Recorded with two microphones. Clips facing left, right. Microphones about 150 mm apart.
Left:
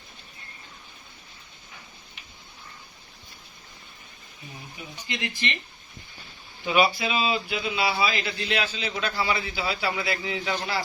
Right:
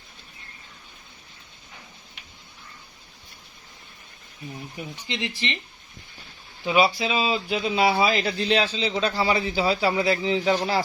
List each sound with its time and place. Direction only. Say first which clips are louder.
5.0 s speech: right 1 dB; 30° right (ahead or behind)
6.7 s speech: right 2 dB; 30° right (ahead or behind)